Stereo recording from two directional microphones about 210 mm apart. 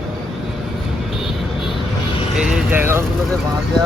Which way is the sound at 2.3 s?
5° right (ahead or behind).